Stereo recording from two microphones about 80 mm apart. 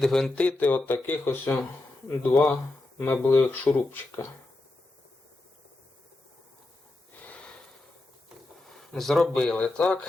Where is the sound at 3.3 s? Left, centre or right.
Left.